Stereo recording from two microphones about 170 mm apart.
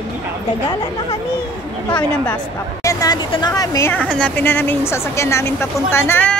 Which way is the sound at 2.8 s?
20° left (ahead or behind).